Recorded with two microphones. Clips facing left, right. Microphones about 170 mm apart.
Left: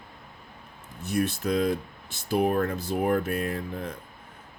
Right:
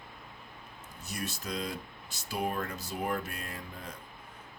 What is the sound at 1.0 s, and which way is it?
Speech, 55° left (ahead or behind).